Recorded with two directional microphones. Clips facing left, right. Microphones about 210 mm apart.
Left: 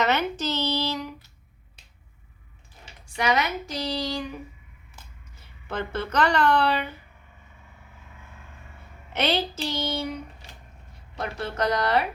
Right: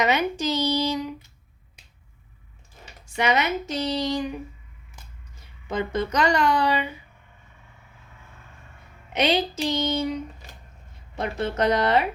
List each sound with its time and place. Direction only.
0.0 s a sound: 10° right (ahead or behind)
3.2 s speech: 25° right (ahead or behind)
5.6 s a woman's voice: 15° right (ahead or behind)
9.1 s a woman's voice: 15° right (ahead or behind)
11.2 s speech: 20° right (ahead or behind)